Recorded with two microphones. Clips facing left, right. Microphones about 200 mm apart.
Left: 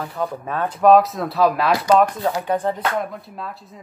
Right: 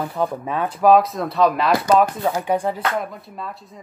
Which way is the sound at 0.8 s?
Centre (ahead or behind).